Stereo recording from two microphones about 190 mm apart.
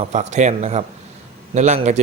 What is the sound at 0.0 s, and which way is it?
Speech, 35° right (ahead or behind).